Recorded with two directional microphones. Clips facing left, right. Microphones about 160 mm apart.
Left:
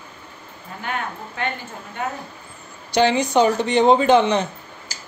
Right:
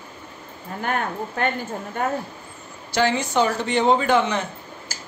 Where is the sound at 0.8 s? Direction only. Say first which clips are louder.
Right 3 dB; 45° right (ahead or behind).